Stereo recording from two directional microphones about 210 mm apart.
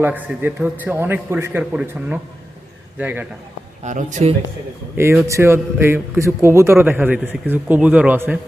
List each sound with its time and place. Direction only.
0.0 s a man's voice: 10° right (ahead or behind)
3.8 s a man's voice: 35° right (ahead or behind)
4.9 s a man's voice: 10° right (ahead or behind)